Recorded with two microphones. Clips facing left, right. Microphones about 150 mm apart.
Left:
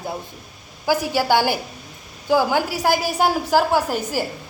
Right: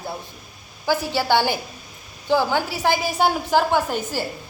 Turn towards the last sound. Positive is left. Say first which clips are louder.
# left 1 dB
turn(degrees=10)  # may be behind; listen again after turning